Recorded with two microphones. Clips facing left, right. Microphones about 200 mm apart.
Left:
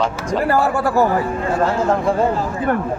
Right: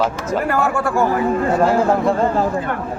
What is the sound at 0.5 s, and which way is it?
Speech, 35° left (ahead or behind).